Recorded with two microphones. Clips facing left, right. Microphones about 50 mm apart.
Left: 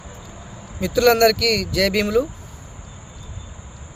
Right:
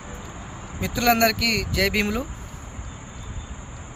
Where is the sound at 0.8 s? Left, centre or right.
Centre.